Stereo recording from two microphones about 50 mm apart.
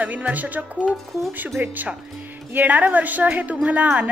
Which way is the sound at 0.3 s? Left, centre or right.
Right.